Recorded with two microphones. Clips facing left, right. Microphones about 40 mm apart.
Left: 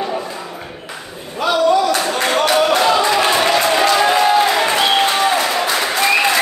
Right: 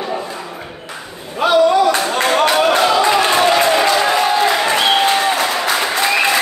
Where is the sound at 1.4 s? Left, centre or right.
Right.